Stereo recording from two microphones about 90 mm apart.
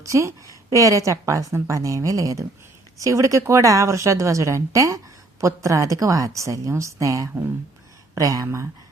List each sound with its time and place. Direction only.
0.0 s speech: 35° right (ahead or behind)